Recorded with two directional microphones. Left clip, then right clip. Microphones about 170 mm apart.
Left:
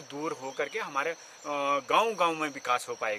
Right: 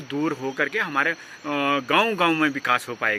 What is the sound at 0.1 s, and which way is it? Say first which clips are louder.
Speech: right 9 dB; 10° left (ahead or behind).